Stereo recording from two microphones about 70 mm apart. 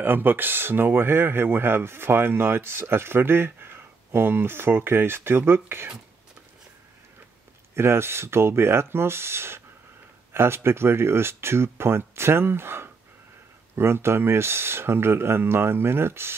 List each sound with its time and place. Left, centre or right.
0.0 s speech: right
7.7 s speech: right